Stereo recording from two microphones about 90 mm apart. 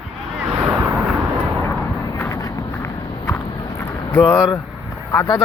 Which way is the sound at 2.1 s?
35° left (ahead or behind).